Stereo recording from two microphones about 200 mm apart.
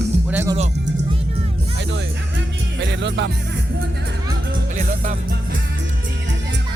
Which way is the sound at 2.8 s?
60° right (ahead or behind).